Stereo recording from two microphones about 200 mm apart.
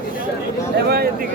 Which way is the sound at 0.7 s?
50° right (ahead or behind).